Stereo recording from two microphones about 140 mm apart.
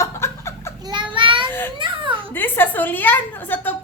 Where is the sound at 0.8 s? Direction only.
35° right (ahead or behind).